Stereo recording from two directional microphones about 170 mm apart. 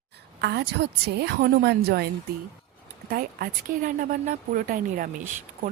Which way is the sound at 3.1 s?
60° right (ahead or behind).